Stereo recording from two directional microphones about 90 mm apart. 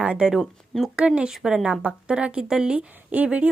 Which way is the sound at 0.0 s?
10° right (ahead or behind).